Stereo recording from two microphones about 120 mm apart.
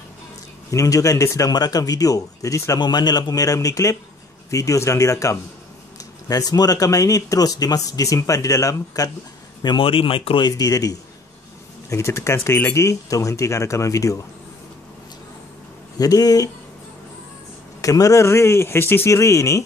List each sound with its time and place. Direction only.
0.7 s speech: 25° left (ahead or behind)
9.6 s speech: 40° left (ahead or behind)
10.5 s speech: 30° left (ahead or behind)
16.0 s speech: 30° left (ahead or behind)
17.8 s speech: 30° left (ahead or behind)